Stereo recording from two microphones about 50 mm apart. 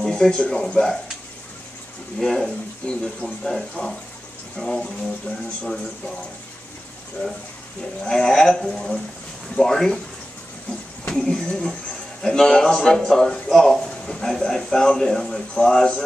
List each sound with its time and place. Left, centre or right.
0.0 s a man's voice: centre
2.1 s a man's voice: centre
2.9 s a man's voice: centre
8.0 s a man's voice: centre
11.1 s a man's voice: centre